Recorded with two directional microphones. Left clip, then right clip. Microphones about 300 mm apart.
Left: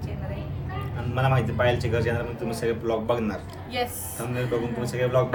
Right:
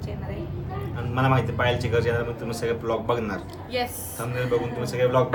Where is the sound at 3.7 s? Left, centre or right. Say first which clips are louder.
Right 1 dB; centre.